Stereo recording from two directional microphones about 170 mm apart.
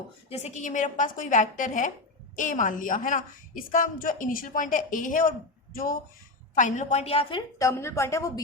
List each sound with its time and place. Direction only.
0.3 s a woman's voice: 40° left (ahead or behind)
7.6 s a woman's voice: 15° left (ahead or behind)